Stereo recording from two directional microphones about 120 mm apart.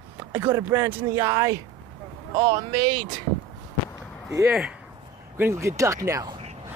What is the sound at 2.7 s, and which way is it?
Speech, 30° right (ahead or behind).